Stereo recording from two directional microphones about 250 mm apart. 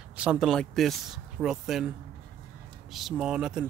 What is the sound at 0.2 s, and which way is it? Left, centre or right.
Speech, centre.